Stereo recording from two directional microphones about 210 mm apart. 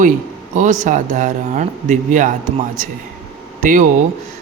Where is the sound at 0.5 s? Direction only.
35° right (ahead or behind).